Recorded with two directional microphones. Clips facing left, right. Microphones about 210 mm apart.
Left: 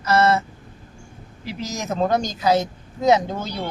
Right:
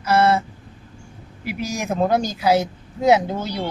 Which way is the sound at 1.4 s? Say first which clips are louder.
Right 3 dB; 10° right (ahead or behind).